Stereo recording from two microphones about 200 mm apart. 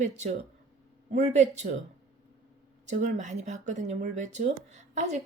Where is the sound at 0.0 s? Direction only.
35° right (ahead or behind).